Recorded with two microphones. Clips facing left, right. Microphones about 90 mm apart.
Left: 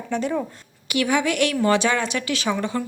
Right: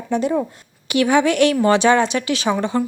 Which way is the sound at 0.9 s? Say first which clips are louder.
Right 5 dB; 30° right (ahead or behind).